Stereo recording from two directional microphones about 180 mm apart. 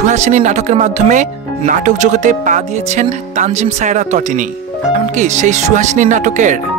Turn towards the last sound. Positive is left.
turn(degrees=-45)  # may be behind; listen again after turning